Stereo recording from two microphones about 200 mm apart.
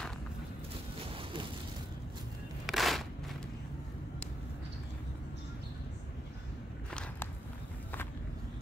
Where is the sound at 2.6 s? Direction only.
Centre (ahead or behind).